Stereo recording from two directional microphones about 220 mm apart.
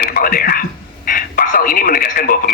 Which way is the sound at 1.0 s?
40° left (ahead or behind).